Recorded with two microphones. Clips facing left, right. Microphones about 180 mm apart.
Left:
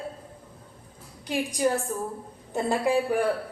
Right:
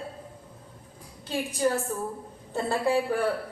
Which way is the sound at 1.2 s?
15° left (ahead or behind).